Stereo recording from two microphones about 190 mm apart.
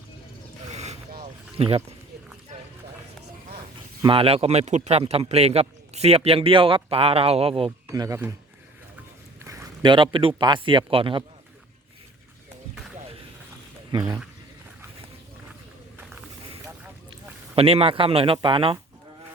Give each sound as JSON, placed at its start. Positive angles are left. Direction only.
{"t": 0.7, "sound": "a sound", "side_deg": -35}
{"t": 1.5, "sound": "speech", "side_deg": -30}
{"t": 4.0, "sound": "a man's voice", "side_deg": -30}
{"t": 7.9, "sound": "speech", "side_deg": -15}
{"t": 9.4, "sound": "a man's voice", "side_deg": -15}
{"t": 13.9, "sound": "speech", "side_deg": -25}
{"t": 17.5, "sound": "speech", "side_deg": -30}